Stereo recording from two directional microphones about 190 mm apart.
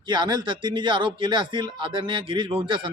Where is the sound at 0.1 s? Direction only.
25° right (ahead or behind).